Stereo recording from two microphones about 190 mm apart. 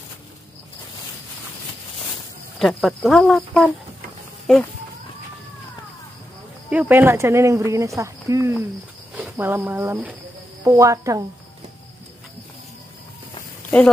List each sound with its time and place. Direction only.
2.6 s speech: centre (ahead or behind)
6.7 s speech: 10° right (ahead or behind)